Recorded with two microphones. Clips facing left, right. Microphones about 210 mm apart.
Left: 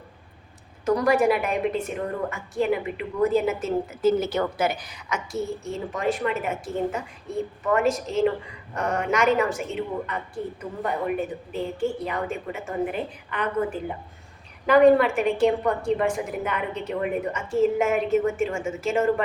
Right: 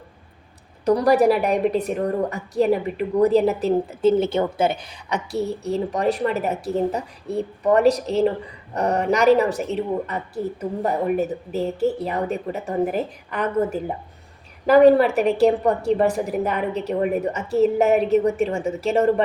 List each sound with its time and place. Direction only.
0.9 s a woman's voice: 35° right (ahead or behind)